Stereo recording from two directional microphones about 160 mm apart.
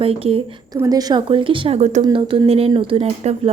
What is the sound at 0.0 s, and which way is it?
Speech, 35° right (ahead or behind).